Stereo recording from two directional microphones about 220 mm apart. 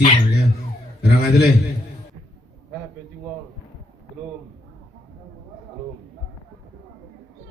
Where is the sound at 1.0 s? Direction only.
45° left (ahead or behind).